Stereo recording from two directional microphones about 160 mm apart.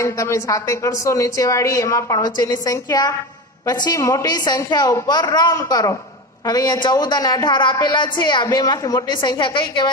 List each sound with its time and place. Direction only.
0.0 s a woman's voice: 20° left (ahead or behind)